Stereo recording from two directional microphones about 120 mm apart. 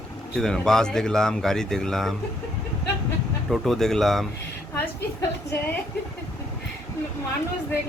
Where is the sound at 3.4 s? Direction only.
Centre (ahead or behind).